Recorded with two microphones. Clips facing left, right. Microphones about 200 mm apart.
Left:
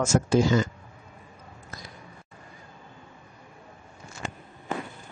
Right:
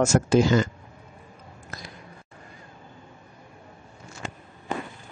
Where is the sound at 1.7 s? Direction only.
75° right (ahead or behind).